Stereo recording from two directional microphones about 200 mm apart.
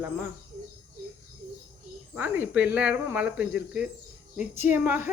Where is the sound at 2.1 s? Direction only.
10° right (ahead or behind).